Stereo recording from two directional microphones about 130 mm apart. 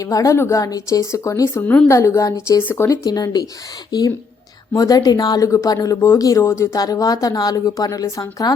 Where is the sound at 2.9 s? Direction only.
30° left (ahead or behind).